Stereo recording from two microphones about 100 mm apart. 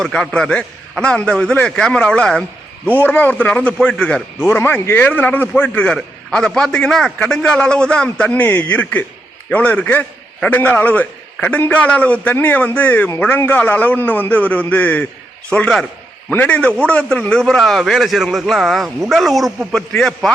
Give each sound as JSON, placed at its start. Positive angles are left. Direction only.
{"t": 0.0, "sound": "a man's voice", "side_deg": 5}
{"t": 2.8, "sound": "a man's voice", "side_deg": 20}
{"t": 4.4, "sound": "a man's voice", "side_deg": 20}